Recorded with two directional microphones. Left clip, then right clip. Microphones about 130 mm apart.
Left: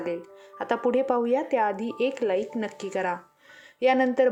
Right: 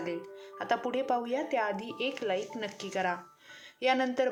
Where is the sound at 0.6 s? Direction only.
55° left (ahead or behind).